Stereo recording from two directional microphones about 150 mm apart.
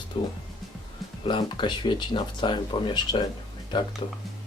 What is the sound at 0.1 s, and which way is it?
Speech, 35° left (ahead or behind).